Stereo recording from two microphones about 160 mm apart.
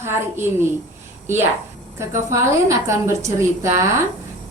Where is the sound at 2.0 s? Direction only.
15° right (ahead or behind).